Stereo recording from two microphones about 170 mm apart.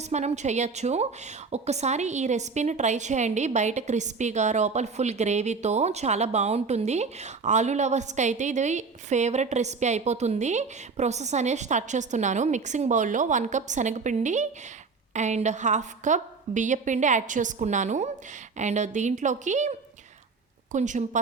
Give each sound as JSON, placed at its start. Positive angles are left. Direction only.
{"t": 0.0, "sound": "a woman's voice", "side_deg": -40}
{"t": 20.7, "sound": "a woman's voice", "side_deg": -45}